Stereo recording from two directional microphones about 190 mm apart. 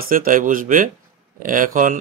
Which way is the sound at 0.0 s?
50° right (ahead or behind).